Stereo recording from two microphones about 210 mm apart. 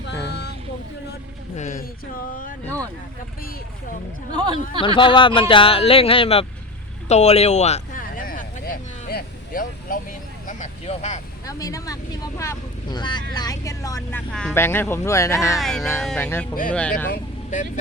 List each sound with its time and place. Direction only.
0.1 s a sound: 55° left (ahead or behind)
1.5 s speech: 35° left (ahead or behind)
2.6 s speech: 15° right (ahead or behind)
4.3 s speech: 20° right (ahead or behind)
4.9 s speech: 25° left (ahead or behind)
7.1 s a sound: 30° left (ahead or behind)
11.4 s speech: 15° left (ahead or behind)
13.3 s vehicle: 20° left (ahead or behind)
14.3 s speech: 5° left (ahead or behind)
15.5 s speech: centre (ahead or behind)
17.1 s speech: 35° left (ahead or behind)